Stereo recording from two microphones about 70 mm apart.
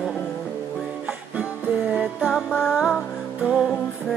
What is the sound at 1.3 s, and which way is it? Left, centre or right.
Music, centre.